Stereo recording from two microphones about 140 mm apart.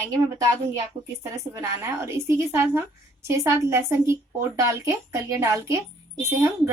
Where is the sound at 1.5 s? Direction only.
20° right (ahead or behind).